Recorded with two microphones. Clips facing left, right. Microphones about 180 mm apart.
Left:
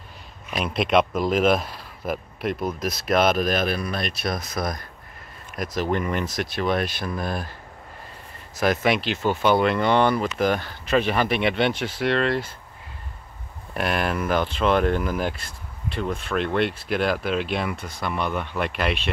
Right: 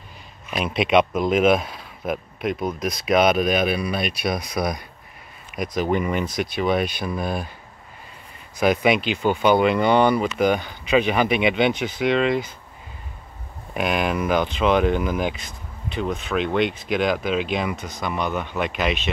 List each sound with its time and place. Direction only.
0.5 s speech: centre (ahead or behind)
8.5 s speech: centre (ahead or behind)
13.7 s speech: centre (ahead or behind)
17.7 s speech: 30° left (ahead or behind)
18.0 s speech: centre (ahead or behind)